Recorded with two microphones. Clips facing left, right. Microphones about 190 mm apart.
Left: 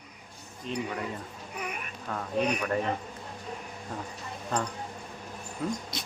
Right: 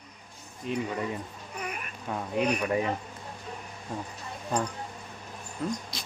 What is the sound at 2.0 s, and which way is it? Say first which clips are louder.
Speech: right 1 dB; 15° right (ahead or behind).